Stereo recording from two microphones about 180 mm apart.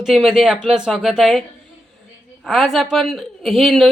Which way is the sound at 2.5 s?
Centre (ahead or behind).